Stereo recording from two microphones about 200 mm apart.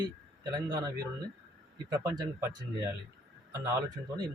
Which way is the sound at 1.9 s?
15° right (ahead or behind).